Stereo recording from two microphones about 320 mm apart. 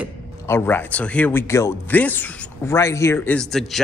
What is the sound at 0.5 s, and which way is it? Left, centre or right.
Speech, centre.